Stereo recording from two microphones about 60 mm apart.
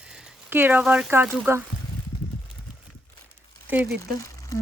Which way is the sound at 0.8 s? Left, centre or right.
Centre.